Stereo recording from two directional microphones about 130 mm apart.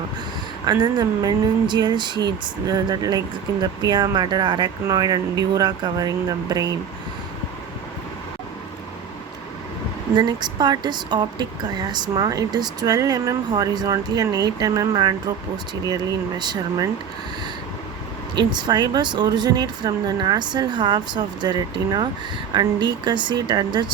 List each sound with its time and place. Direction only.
0.6 s a woman's voice: 30° right (ahead or behind)
10.2 s a woman's voice: 35° right (ahead or behind)
18.3 s a woman's voice: 35° right (ahead or behind)